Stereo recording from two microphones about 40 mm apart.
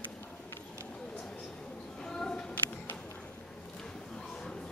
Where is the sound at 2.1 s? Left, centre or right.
Centre.